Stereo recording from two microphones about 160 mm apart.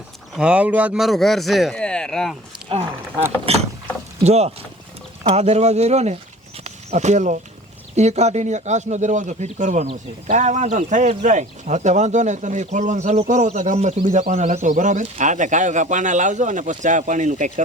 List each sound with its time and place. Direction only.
0.3 s speech: 5° right (ahead or behind)
2.6 s a sound: 40° right (ahead or behind)
3.5 s speech: 40° right (ahead or behind)